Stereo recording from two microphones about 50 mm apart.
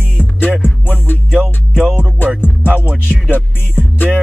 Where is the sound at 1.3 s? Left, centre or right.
Centre.